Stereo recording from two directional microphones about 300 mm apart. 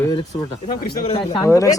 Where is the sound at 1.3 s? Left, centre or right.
Centre.